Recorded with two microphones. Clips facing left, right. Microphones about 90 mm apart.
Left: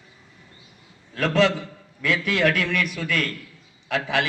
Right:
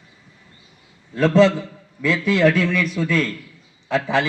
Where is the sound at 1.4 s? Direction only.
30° right (ahead or behind).